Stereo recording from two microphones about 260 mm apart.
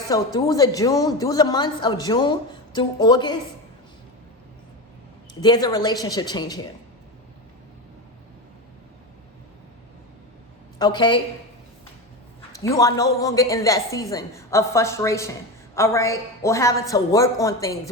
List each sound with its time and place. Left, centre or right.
0.1 s a woman's voice: centre
5.3 s a woman's voice: centre
10.8 s a woman's voice: centre
12.5 s a woman's voice: centre